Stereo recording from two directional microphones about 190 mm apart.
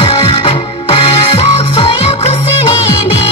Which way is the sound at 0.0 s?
30° left (ahead or behind).